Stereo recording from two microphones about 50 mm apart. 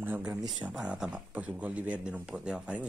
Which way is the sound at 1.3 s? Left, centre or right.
Right.